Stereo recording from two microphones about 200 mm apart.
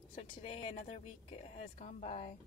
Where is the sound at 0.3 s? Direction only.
35° left (ahead or behind).